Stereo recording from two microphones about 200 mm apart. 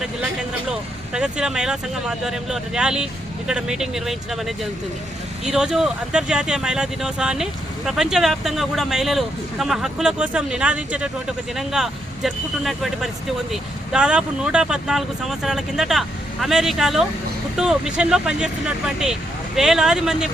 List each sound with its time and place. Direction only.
0.7 s speech: 5° right (ahead or behind)